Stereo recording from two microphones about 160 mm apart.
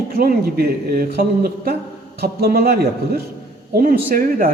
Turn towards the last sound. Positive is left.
turn(degrees=-60)  # may be behind; listen again after turning